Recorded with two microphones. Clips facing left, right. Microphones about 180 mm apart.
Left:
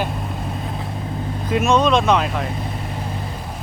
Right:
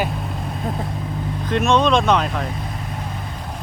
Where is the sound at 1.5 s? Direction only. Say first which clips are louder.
Even; 5° left (ahead or behind).